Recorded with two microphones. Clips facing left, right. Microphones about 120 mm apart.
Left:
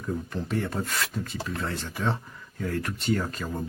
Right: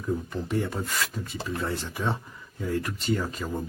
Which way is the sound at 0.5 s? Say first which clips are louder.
Even; 5° right (ahead or behind).